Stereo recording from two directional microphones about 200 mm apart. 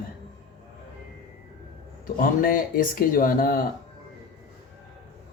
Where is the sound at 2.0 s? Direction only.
45° left (ahead or behind).